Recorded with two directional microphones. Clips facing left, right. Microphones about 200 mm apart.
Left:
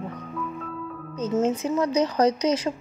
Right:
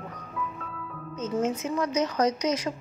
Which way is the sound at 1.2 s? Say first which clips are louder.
Left 4 dB; 30° left (ahead or behind).